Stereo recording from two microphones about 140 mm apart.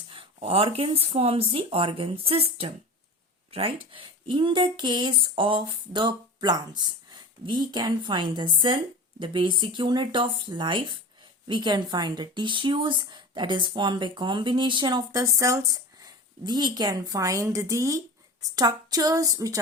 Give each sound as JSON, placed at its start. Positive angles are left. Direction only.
{"t": 0.1, "sound": "speech", "side_deg": -40}